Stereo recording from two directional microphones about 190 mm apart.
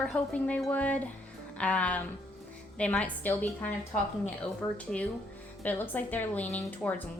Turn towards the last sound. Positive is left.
turn(degrees=10)  # may be behind; listen again after turning